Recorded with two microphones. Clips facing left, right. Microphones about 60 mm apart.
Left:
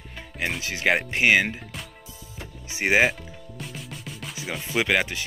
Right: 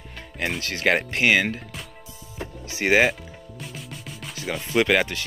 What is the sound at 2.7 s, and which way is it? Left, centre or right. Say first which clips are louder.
Speech: right 2 dB; centre.